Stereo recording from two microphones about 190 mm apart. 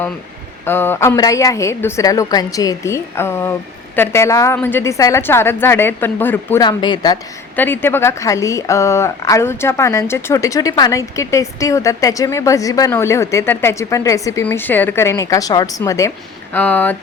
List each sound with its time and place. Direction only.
0.6 s a woman's voice: 10° left (ahead or behind)
6.6 s speech: 20° left (ahead or behind)
7.5 s a woman's voice: 10° left (ahead or behind)